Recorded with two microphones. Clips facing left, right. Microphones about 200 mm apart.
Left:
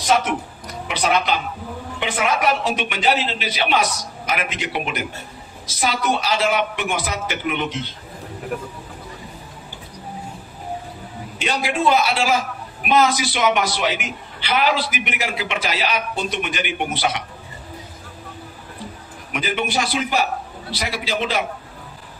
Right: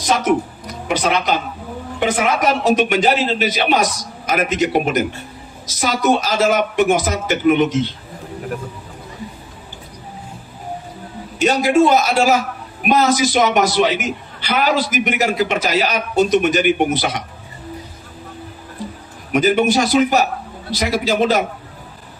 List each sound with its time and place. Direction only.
0.8 s a man's voice: 45° right (ahead or behind)
11.3 s a man's voice: 45° right (ahead or behind)
19.3 s a man's voice: 45° right (ahead or behind)